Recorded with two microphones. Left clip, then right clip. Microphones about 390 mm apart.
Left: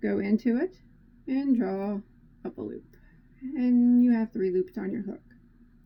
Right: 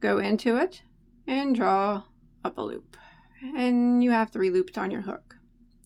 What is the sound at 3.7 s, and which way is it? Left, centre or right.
Speech, right.